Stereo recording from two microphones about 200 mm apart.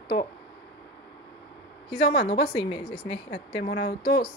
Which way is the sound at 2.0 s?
55° left (ahead or behind).